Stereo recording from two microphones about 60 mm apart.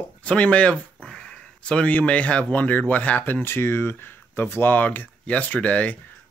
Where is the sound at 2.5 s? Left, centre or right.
Left.